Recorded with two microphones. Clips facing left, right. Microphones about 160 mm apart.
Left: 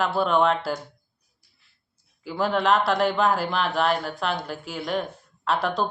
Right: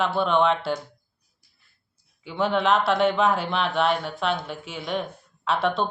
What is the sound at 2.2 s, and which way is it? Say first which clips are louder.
Speech: even; centre (ahead or behind).